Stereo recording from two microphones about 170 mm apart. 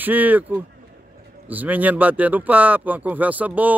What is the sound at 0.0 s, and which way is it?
Speech, 10° right (ahead or behind).